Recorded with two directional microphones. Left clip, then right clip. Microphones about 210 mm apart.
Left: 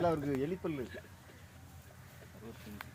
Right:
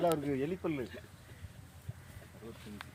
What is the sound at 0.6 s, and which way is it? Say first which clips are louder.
Speech: right 2 dB; 25° right (ahead or behind).